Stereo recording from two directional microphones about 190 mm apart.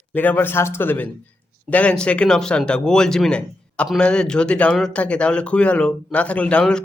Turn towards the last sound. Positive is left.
turn(degrees=5)  # may be behind; listen again after turning